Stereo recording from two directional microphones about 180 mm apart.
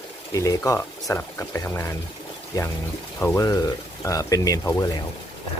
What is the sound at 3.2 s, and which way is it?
Speech, 10° left (ahead or behind).